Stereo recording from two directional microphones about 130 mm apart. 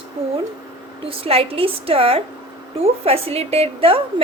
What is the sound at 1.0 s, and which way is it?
Speech, 50° right (ahead or behind).